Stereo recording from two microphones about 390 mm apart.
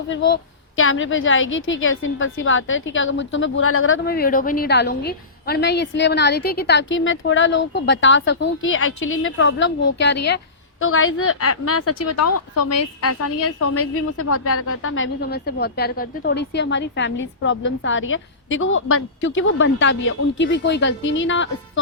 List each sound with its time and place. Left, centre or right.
0.8 s a woman's voice: left